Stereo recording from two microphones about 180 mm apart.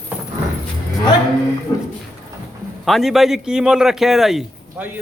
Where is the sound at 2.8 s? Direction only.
Centre (ahead or behind).